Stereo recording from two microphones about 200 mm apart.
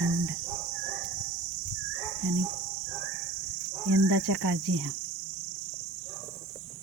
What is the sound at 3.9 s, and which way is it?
Speech, 75° right (ahead or behind).